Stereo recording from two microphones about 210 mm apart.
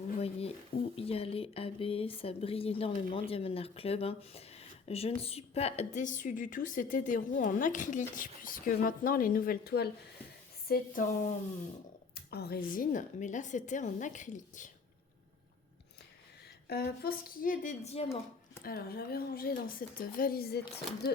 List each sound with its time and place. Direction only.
0.2 s a sound: 30° left (ahead or behind)
0.9 s a woman's voice: 25° left (ahead or behind)
12.1 s a woman's voice: 50° left (ahead or behind)
16.6 s a woman's voice: 50° left (ahead or behind); by 18.2 s 30° left (ahead or behind)
18.6 s speech: 45° left (ahead or behind)